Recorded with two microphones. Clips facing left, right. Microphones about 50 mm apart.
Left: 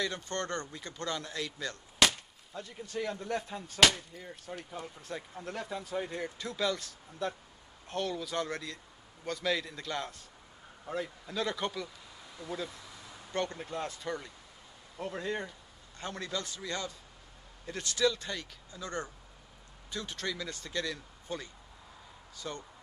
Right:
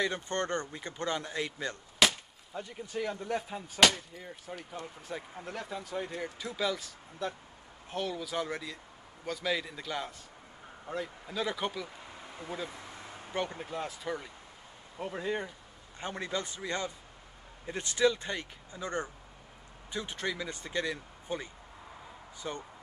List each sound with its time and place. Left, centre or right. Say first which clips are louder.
0.0 s speech: right 3 dB; right
2.0 s chop: even; centre
2.5 s speech: right 1 dB; centre
12.0 s a sound: right 3 dB; right
12.6 s vehicle: right 3 dB; right
13.3 s speech: even; centre
16.0 s speech: right 2 dB; right